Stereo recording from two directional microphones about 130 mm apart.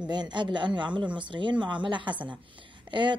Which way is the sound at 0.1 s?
35° right (ahead or behind).